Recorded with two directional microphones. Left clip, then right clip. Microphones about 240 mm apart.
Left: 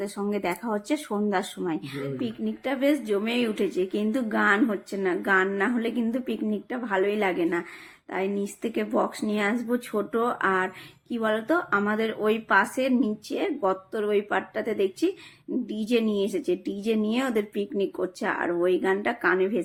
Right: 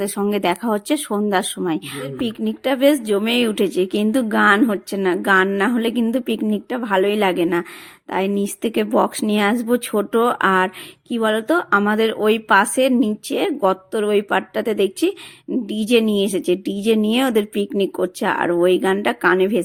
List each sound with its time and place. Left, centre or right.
0.0 s speech: right